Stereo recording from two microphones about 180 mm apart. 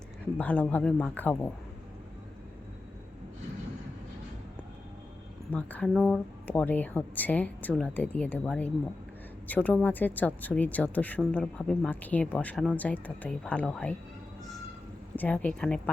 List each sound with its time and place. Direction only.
0.3 s speech: 10° left (ahead or behind)
5.5 s speech: 10° left (ahead or behind)
15.1 s speech: 10° left (ahead or behind)